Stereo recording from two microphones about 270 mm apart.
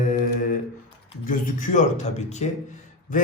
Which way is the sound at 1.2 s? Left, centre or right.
Left.